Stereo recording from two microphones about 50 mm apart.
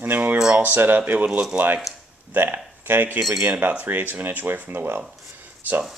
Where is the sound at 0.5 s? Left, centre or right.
Right.